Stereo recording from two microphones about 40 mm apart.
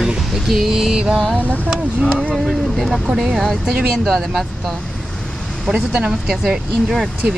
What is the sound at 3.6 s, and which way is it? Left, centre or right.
Speech, centre.